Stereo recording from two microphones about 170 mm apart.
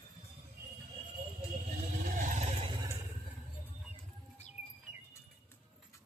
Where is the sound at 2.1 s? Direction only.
50° right (ahead or behind).